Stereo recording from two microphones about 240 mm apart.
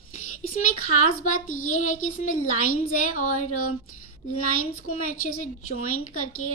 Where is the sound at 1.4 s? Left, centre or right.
Left.